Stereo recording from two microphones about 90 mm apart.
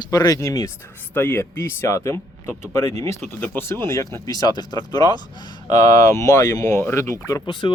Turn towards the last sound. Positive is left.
turn(degrees=35)  # may be behind; listen again after turning